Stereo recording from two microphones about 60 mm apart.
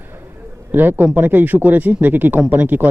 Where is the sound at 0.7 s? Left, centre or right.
Right.